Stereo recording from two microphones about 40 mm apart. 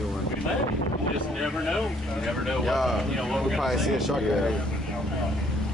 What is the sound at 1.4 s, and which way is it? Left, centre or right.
Speech, centre.